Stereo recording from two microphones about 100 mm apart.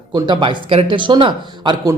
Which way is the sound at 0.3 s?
55° right (ahead or behind).